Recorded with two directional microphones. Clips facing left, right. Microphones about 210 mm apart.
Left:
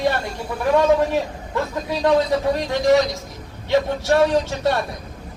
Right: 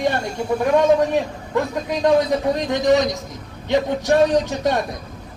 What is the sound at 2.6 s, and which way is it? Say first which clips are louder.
A man's voice: even; 20° right (ahead or behind).